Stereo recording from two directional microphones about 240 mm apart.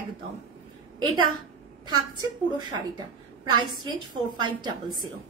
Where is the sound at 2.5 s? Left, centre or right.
Centre.